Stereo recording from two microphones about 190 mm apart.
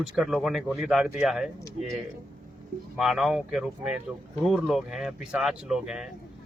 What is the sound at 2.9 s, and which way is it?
Speech, centre (ahead or behind).